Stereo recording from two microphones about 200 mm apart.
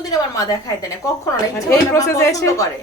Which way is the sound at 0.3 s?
15° left (ahead or behind).